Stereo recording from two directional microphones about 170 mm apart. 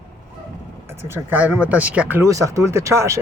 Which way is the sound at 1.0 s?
15° right (ahead or behind).